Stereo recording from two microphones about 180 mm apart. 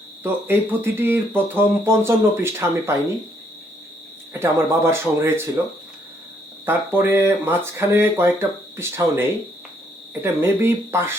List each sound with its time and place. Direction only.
0.2 s speech: 10° right (ahead or behind)
4.4 s speech: 15° right (ahead or behind)
6.7 s speech: 10° right (ahead or behind)
10.2 s speech: 15° right (ahead or behind)